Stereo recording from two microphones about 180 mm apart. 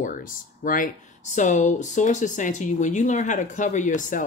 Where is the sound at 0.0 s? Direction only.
50° left (ahead or behind).